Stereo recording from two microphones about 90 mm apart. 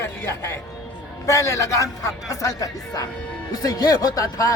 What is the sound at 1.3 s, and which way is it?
A man's voice, 35° left (ahead or behind).